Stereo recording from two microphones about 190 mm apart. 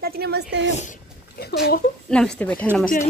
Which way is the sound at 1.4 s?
55° left (ahead or behind).